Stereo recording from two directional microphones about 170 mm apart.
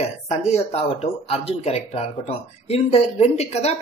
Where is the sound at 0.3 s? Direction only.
40° left (ahead or behind).